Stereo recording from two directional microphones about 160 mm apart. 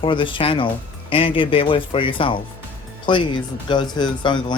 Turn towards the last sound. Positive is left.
turn(degrees=30)  # may be behind; listen again after turning